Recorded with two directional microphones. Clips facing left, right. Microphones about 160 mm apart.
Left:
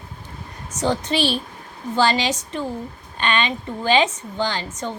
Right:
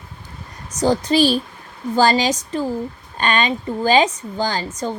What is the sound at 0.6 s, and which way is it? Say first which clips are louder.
A woman's voice: right 4 dB; 40° right (ahead or behind).